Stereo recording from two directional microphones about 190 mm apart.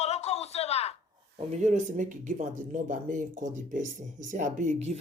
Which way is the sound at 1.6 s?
40° right (ahead or behind).